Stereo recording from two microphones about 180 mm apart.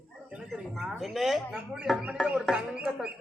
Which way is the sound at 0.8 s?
Centre (ahead or behind).